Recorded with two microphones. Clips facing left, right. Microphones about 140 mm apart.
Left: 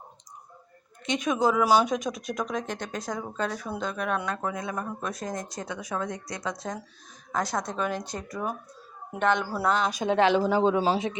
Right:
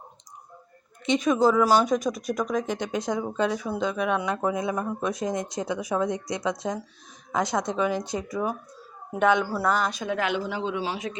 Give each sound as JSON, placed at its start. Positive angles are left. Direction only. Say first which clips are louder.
{"t": 1.1, "sound": "speech", "louder": "right 4 dB", "side_deg": 0}
{"t": 2.7, "sound": "speech", "louder": "right 5 dB", "side_deg": -15}
{"t": 4.3, "sound": "speech", "louder": "right 5 dB", "side_deg": -20}
{"t": 9.4, "sound": "speech", "louder": "right 3 dB", "side_deg": 10}
{"t": 9.6, "sound": "speech", "louder": "left 1 dB", "side_deg": -5}
{"t": 9.9, "sound": "speech", "louder": "left 5 dB", "side_deg": 25}